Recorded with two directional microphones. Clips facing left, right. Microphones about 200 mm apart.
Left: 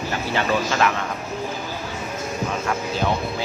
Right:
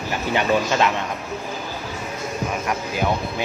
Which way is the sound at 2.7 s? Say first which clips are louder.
Even; 15° right (ahead or behind).